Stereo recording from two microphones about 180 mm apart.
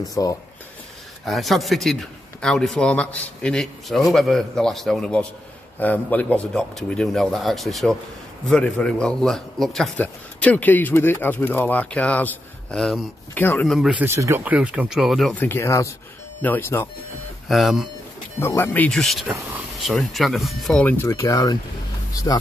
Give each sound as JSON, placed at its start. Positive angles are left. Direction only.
{"t": 0.1, "sound": "speech", "side_deg": 20}
{"t": 1.2, "sound": "a man's voice", "side_deg": 0}
{"t": 13.7, "sound": "a man's voice", "side_deg": -5}
{"t": 17.5, "sound": "a man's voice", "side_deg": 0}
{"t": 18.4, "sound": "a man's voice", "side_deg": 15}
{"t": 21.1, "sound": "speech", "side_deg": 20}